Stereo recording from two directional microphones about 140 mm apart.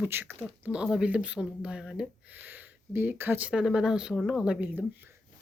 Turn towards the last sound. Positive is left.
turn(degrees=-10)  # may be behind; listen again after turning